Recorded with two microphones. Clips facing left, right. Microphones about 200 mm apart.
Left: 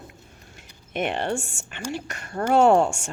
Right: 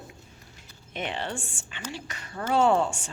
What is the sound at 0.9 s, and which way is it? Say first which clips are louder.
Speech: left 7 dB; 55° left (ahead or behind).